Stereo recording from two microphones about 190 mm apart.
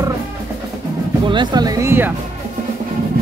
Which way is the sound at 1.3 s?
25° right (ahead or behind).